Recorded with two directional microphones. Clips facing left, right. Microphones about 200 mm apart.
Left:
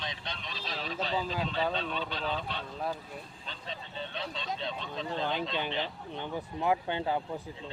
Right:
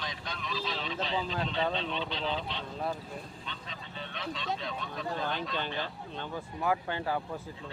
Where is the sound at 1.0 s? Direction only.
40° left (ahead or behind).